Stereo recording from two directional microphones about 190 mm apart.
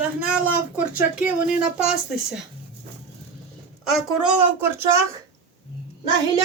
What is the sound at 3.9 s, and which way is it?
Speech, 5° right (ahead or behind).